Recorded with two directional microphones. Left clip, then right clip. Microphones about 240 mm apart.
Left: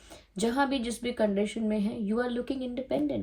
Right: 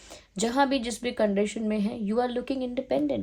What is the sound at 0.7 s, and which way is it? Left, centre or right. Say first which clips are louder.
Speech: right 3 dB; right.